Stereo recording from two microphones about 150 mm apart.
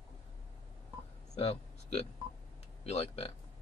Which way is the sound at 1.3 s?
40° left (ahead or behind).